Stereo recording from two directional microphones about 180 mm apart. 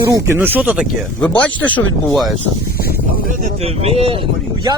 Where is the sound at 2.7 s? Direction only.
55° left (ahead or behind).